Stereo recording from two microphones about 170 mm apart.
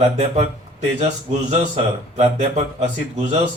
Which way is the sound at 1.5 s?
40° right (ahead or behind).